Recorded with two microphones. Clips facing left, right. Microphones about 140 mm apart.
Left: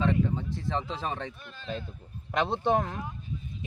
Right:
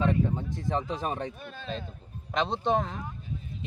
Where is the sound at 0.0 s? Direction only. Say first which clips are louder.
Even; 15° right (ahead or behind).